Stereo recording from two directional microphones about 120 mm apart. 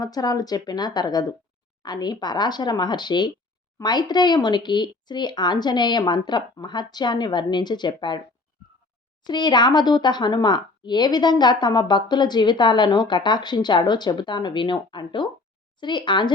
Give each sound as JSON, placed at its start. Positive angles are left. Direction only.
{"t": 0.0, "sound": "speech", "side_deg": 35}
{"t": 9.2, "sound": "speech", "side_deg": 40}